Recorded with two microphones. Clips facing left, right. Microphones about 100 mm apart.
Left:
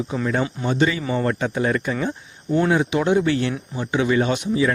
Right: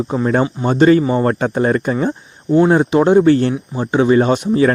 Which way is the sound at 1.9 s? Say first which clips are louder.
Right 7 dB; 30° right (ahead or behind).